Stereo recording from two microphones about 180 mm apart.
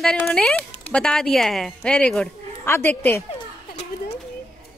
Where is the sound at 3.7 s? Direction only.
35° left (ahead or behind).